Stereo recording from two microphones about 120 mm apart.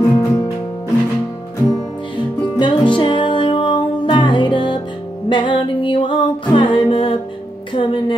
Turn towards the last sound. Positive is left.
turn(degrees=45)  # may be behind; listen again after turning